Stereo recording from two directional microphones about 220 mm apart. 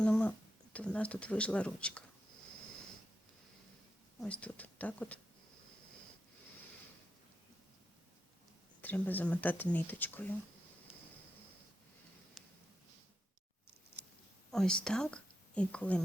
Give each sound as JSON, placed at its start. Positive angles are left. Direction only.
{"t": 0.0, "sound": "speech", "side_deg": 5}
{"t": 4.2, "sound": "speech", "side_deg": 5}
{"t": 8.8, "sound": "speech", "side_deg": 10}
{"t": 12.4, "sound": "a sound", "side_deg": 0}
{"t": 14.5, "sound": "speech", "side_deg": 5}